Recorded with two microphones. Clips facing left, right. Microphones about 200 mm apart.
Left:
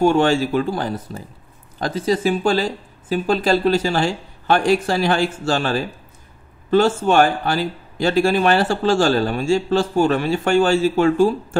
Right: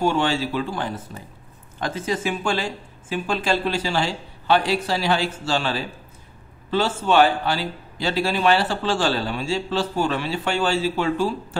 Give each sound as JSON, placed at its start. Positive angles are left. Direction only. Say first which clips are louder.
{"t": 0.0, "sound": "a man's voice", "louder": "left 6 dB", "side_deg": 50}